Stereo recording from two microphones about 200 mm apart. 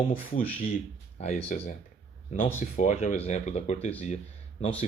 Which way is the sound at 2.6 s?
40° left (ahead or behind).